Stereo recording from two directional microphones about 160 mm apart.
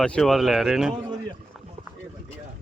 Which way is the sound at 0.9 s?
30° right (ahead or behind).